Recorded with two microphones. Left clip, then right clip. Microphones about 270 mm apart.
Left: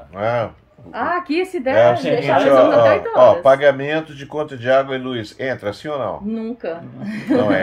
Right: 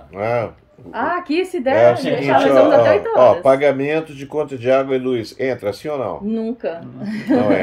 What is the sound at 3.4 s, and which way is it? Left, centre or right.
Speech, left.